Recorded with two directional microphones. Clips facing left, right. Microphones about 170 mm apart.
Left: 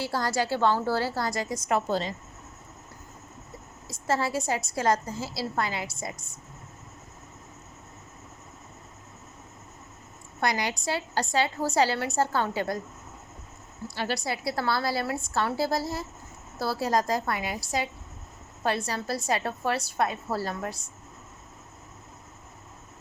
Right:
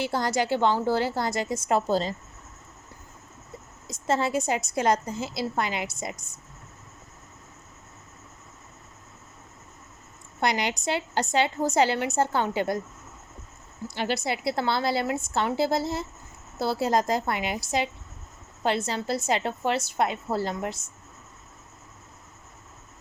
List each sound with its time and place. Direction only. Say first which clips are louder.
0.0 s a woman's voice: right 2 dB; 20° right (ahead or behind); by 2.1 s 35° right (ahead or behind)
3.8 s a woman's voice: right 2 dB; 20° right (ahead or behind)
10.4 s a woman's voice: right 2 dB; 20° right (ahead or behind)
13.8 s a woman's voice: right 2 dB; 20° right (ahead or behind)